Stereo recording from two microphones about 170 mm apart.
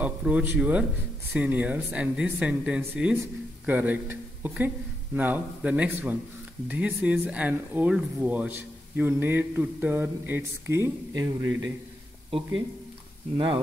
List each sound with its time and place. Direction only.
0.0 s speech: 10° right (ahead or behind)